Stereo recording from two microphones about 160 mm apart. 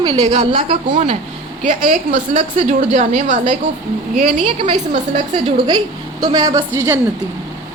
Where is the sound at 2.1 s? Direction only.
45° right (ahead or behind).